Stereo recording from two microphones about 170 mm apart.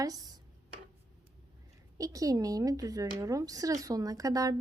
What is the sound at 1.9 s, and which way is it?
Speech, 20° right (ahead or behind).